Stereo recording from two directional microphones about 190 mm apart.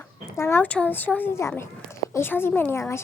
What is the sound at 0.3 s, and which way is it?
A child's voice, 15° left (ahead or behind).